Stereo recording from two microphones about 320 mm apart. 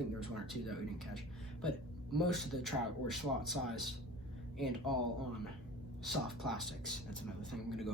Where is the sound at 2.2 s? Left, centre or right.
Centre.